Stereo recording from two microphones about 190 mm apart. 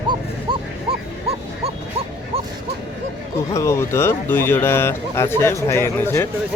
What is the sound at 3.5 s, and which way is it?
Speech, 15° left (ahead or behind).